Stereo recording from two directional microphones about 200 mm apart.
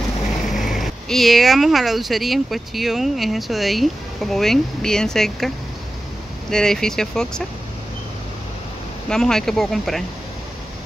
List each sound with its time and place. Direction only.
0.5 s speech: centre (ahead or behind)
6.5 s speech: 5° left (ahead or behind)
9.1 s speech: 5° left (ahead or behind)